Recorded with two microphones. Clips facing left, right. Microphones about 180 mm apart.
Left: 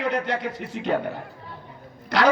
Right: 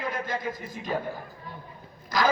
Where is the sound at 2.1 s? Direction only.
70° left (ahead or behind).